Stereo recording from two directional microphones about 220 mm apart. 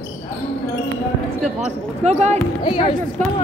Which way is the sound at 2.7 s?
20° left (ahead or behind).